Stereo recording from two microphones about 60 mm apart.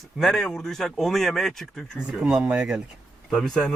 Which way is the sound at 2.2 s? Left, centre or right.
Centre.